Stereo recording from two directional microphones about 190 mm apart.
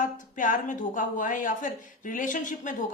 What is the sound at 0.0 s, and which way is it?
A woman's voice, 45° left (ahead or behind).